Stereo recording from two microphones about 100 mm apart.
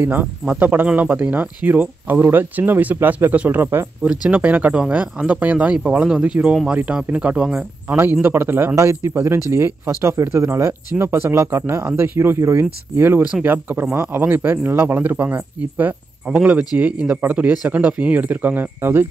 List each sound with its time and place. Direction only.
0.0 s speech: 20° right (ahead or behind)
8.0 s speech: 20° right (ahead or behind)